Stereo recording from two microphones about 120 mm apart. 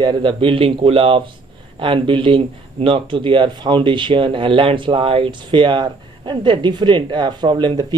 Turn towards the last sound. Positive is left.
turn(degrees=-40)  # may be behind; listen again after turning